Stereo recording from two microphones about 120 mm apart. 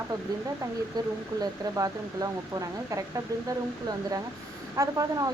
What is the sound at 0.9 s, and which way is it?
Speech, 30° right (ahead or behind).